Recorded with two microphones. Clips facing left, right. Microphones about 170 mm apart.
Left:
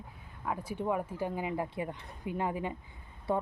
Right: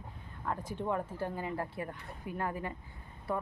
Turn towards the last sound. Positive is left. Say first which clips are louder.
# left 4 dB
turn(degrees=25)  # may be behind; listen again after turning